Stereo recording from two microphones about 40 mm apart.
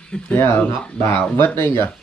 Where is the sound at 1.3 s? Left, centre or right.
Left.